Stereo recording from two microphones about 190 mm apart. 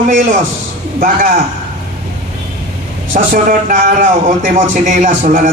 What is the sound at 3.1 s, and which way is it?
Speech, 45° right (ahead or behind).